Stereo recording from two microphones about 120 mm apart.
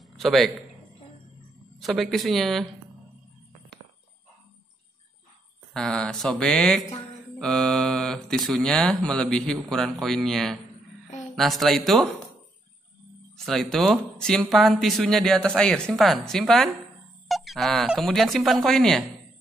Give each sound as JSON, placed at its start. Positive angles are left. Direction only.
{"t": 0.0, "sound": "a sound", "side_deg": 0}
{"t": 1.8, "sound": "speech", "side_deg": 0}
{"t": 5.7, "sound": "speech", "side_deg": 5}
{"t": 13.5, "sound": "speech", "side_deg": 0}